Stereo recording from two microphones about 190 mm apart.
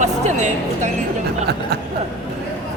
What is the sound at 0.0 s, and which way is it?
Speech, 40° right (ahead or behind).